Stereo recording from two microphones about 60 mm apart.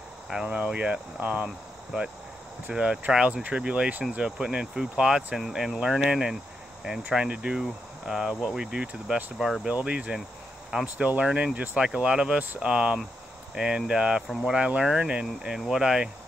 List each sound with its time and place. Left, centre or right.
0.5 s speech: right
9.0 s speech: centre
9.7 s speech: centre
14.2 s speech: centre
14.5 s speech: centre